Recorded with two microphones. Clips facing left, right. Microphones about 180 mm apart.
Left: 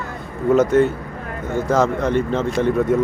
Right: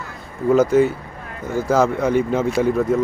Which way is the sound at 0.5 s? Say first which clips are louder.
Even; centre (ahead or behind).